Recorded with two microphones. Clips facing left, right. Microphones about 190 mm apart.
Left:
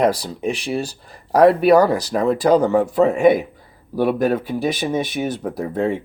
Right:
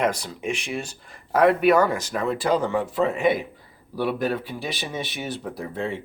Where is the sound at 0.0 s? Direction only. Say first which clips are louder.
Left 6 dB; 35° left (ahead or behind).